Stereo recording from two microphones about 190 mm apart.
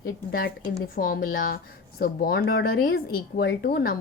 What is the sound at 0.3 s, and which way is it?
Speech, 50° left (ahead or behind).